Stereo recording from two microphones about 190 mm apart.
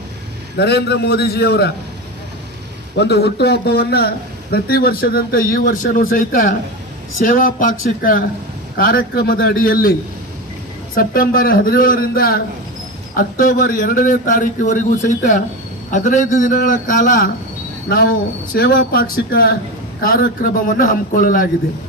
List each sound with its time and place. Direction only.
0.5 s a man's voice: 60° left (ahead or behind)
2.9 s a man's voice: 60° left (ahead or behind)
10.9 s a man's voice: 50° left (ahead or behind)